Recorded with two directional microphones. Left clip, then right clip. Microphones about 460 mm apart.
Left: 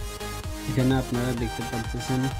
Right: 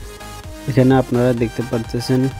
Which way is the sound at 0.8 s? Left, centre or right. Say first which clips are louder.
Right 12 dB; centre.